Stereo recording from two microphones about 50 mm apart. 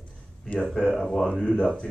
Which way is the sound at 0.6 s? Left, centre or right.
Centre.